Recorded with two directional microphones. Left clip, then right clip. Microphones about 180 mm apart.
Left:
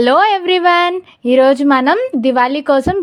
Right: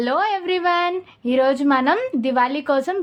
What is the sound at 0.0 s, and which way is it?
Speech, 45° left (ahead or behind).